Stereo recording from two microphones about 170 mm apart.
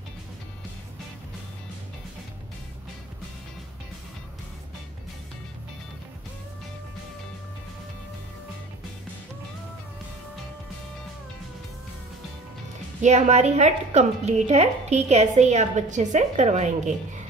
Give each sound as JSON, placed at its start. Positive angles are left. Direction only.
{"t": 13.0, "sound": "a woman's voice", "side_deg": -45}